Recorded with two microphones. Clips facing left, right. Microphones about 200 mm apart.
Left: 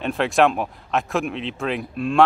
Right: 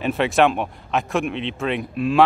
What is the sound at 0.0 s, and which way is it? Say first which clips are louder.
Speech: right 1 dB; centre (ahead or behind).